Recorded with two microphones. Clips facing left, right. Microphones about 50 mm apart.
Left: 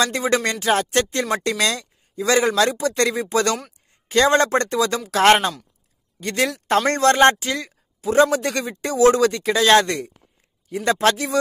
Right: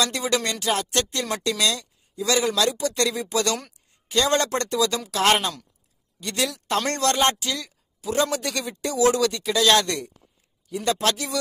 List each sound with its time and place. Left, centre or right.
0.0 s a man's voice: left